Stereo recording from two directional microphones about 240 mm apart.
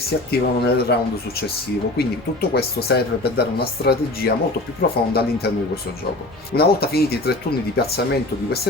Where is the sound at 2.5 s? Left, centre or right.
Left.